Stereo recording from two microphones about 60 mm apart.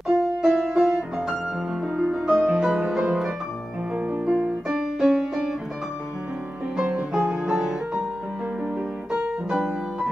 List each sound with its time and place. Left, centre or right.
0.4 s music: centre
4.3 s piano: right
4.6 s music: centre
6.9 s music: centre
9.5 s piano: centre